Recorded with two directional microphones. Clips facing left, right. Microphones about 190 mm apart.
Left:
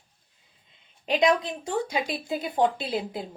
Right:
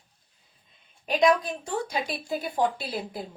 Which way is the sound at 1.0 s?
20° left (ahead or behind).